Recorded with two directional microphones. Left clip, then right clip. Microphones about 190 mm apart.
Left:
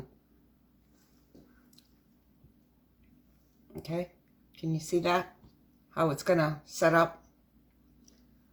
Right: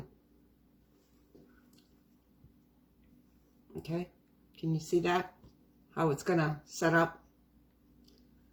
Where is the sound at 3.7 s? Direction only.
25° left (ahead or behind).